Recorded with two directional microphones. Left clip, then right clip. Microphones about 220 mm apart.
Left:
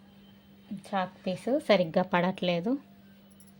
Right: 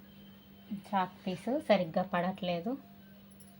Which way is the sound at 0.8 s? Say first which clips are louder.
Left 1 dB; 50° left (ahead or behind).